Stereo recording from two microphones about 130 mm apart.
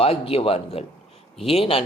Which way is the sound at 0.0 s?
45° left (ahead or behind).